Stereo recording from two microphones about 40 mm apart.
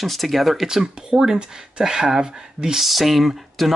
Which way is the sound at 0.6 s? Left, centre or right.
Centre.